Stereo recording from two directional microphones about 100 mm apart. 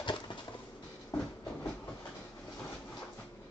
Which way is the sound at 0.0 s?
50° left (ahead or behind).